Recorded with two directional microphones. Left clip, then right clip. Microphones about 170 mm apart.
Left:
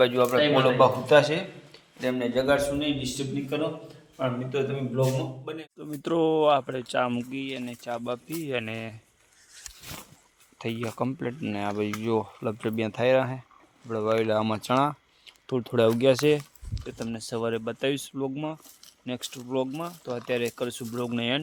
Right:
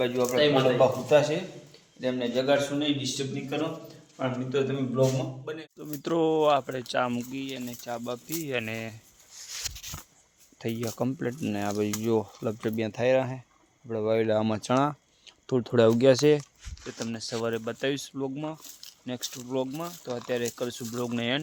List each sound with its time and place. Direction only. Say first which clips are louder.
0.0 s speech: left 3 dB; 10° left (ahead or behind)
2.4 s a man's voice: left 1 dB; 20° left (ahead or behind)
2.7 s speech: even; 5° left (ahead or behind)
10.6 s speech: left 1 dB; 10° right (ahead or behind)
12.7 s speech: left 2 dB; 10° left (ahead or behind)
13.8 s speech: left 1 dB; centre (ahead or behind); by 16.1 s 25° right (ahead or behind)
16.8 s speech: even; 5° left (ahead or behind)